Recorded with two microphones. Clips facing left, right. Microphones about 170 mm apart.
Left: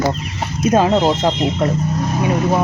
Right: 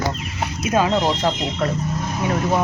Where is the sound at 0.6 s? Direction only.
30° left (ahead or behind).